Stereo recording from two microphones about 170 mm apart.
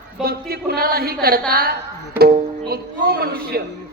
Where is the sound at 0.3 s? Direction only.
65° right (ahead or behind).